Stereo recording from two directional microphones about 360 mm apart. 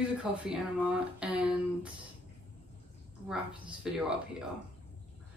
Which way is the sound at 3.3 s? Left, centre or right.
Centre.